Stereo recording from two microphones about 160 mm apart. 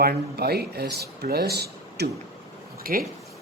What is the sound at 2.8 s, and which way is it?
Speech, 65° right (ahead or behind).